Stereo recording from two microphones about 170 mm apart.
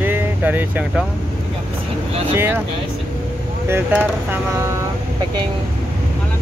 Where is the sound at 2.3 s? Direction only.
15° right (ahead or behind).